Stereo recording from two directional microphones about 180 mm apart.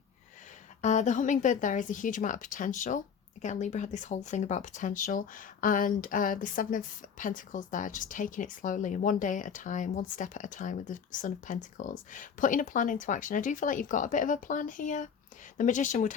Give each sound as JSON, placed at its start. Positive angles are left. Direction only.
{"t": 0.8, "sound": "speech", "side_deg": 40}